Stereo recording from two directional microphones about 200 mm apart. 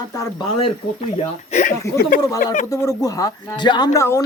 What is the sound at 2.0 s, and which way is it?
Speech, 45° left (ahead or behind).